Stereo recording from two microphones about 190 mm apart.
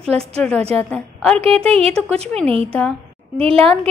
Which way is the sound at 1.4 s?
30° right (ahead or behind).